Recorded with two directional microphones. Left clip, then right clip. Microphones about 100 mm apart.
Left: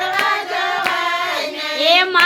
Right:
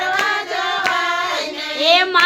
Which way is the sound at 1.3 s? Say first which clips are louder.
Left 1 dB; 20° right (ahead or behind).